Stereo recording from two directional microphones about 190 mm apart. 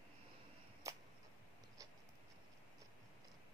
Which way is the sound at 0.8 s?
15° right (ahead or behind).